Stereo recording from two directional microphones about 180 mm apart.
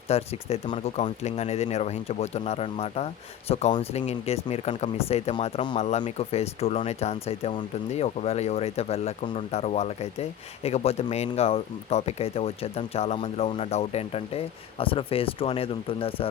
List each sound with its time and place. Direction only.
0.1 s speech: 35° left (ahead or behind)